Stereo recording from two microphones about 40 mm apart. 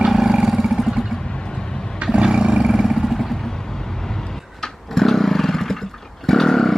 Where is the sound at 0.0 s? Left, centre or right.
Centre.